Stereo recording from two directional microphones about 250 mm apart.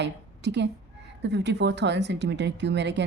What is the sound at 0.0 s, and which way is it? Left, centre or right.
A woman's voice, right.